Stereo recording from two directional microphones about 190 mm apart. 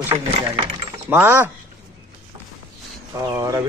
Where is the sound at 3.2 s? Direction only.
20° right (ahead or behind).